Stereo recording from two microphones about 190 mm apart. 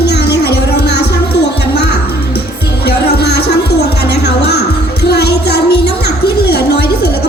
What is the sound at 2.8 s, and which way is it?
Music, 60° left (ahead or behind).